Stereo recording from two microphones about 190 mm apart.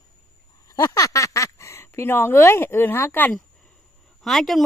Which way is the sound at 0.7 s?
20° left (ahead or behind).